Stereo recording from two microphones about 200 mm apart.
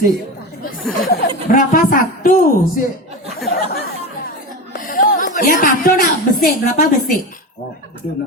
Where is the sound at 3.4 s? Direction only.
50° left (ahead or behind).